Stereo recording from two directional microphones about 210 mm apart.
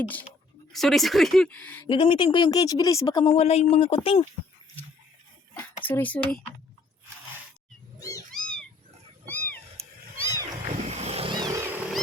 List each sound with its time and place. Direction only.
0.7 s speech: centre (ahead or behind)
1.9 s speech: 25° left (ahead or behind)
5.5 s speech: 10° left (ahead or behind)
8.3 s cat: 5° left (ahead or behind)
10.2 s a sound: 15° right (ahead or behind)
10.7 s vehicle: 30° right (ahead or behind); by 11.9 s 10° right (ahead or behind)